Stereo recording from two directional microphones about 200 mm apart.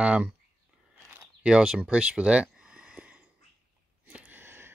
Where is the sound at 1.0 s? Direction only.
5° right (ahead or behind).